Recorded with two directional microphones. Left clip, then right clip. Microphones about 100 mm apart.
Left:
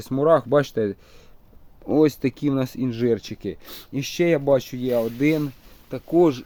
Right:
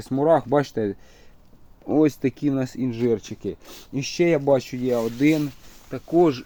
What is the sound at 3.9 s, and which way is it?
Speech, 15° left (ahead or behind).